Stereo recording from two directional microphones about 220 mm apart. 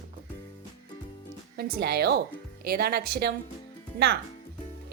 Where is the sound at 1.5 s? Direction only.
45° right (ahead or behind).